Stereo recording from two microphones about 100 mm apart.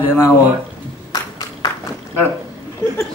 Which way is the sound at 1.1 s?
35° left (ahead or behind).